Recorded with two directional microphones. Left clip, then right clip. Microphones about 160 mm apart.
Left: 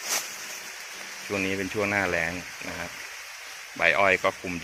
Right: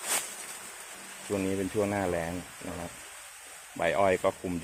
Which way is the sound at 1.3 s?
10° right (ahead or behind).